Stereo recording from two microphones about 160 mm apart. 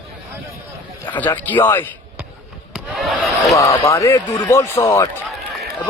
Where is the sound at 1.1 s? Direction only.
10° left (ahead or behind).